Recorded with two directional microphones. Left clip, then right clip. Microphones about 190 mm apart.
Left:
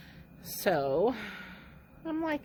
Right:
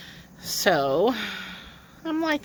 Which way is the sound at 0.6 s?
20° right (ahead or behind).